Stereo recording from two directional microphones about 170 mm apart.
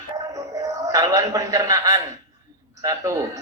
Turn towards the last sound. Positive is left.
turn(degrees=-20)  # may be behind; listen again after turning